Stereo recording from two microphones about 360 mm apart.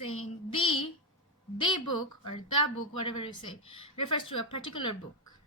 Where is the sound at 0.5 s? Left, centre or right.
Centre.